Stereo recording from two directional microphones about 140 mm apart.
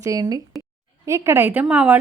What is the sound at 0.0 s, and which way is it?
A woman's voice, 25° right (ahead or behind).